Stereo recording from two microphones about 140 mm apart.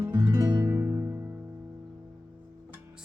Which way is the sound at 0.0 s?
15° right (ahead or behind).